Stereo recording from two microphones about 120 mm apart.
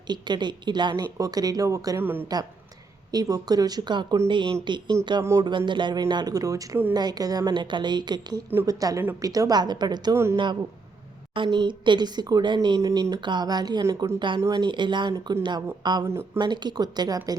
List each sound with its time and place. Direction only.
0.1 s a woman's voice: 40° right (ahead or behind)
2.0 s a woman's voice: 15° right (ahead or behind)
2.2 s a woman's voice: 35° right (ahead or behind)
13.8 s a woman's voice: 25° right (ahead or behind)
14.2 s a woman's voice: 40° right (ahead or behind)
16.0 s a woman's voice: 20° right (ahead or behind)
16.4 s a woman's voice: 35° right (ahead or behind)